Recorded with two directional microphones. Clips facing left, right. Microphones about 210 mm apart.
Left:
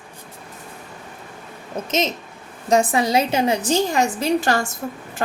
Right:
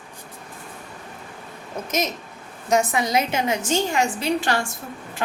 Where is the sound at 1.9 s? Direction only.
25° left (ahead or behind).